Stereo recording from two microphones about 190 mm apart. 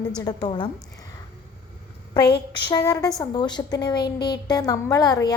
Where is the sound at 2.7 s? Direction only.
15° left (ahead or behind).